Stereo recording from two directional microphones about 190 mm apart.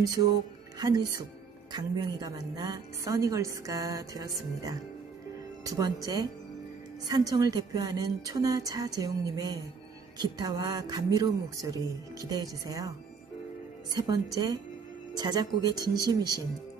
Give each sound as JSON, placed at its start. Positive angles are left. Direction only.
{"t": 0.0, "sound": "a woman's voice", "side_deg": -20}
{"t": 13.9, "sound": "a woman's voice", "side_deg": -20}